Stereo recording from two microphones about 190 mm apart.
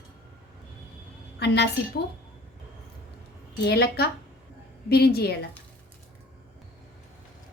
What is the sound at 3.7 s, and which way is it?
A woman's voice, 55° left (ahead or behind).